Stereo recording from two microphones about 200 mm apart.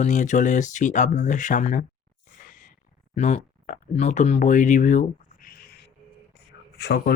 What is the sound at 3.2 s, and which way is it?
Speech, 35° left (ahead or behind).